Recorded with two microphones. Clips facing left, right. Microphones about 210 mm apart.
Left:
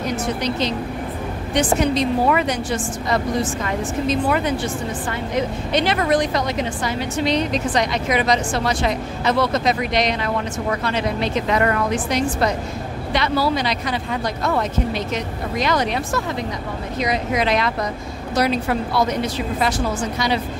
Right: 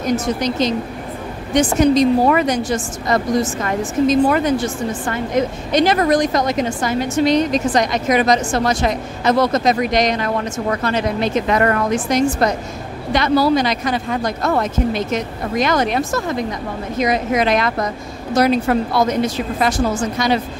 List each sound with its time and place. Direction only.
0.1 s a woman's voice: 45° right (ahead or behind)